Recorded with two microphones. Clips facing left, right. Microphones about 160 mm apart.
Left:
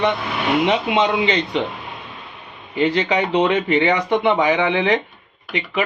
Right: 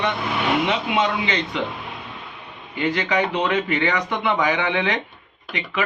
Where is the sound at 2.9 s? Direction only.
25° left (ahead or behind).